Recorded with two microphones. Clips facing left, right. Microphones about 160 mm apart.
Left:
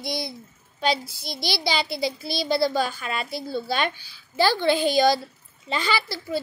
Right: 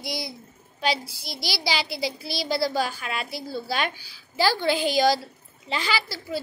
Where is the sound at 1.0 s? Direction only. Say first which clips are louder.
Left 3 dB; 50° left (ahead or behind).